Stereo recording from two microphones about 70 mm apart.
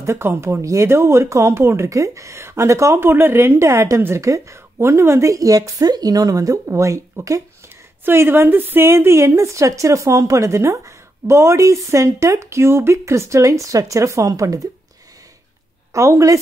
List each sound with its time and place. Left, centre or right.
0.0 s a woman's voice: right
3.0 s a woman's voice: right
8.0 s a woman's voice: right
15.9 s a woman's voice: right